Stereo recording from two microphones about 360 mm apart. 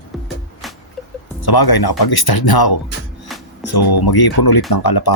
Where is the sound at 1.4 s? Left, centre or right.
Left.